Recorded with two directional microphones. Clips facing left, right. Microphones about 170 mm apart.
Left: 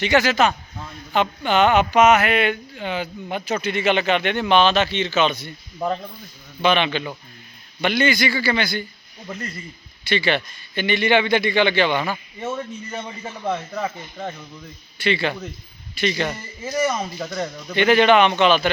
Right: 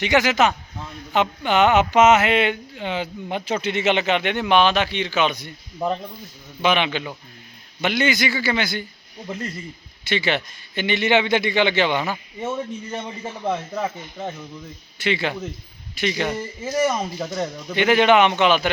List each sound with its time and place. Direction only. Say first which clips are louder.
0.0 s speech: even; 20° right (ahead or behind)
6.6 s speech: left 1 dB; 15° right (ahead or behind)
10.1 s speech: left 1 dB; 20° right (ahead or behind)